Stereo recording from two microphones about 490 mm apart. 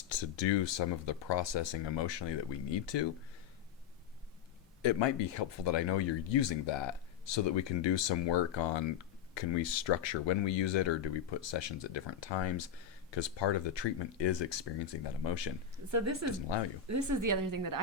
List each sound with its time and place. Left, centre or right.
0.1 s speech: left
4.8 s speech: left
15.9 s a woman's voice: right